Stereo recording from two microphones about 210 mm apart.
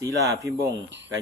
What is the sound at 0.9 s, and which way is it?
Speech, 60° right (ahead or behind).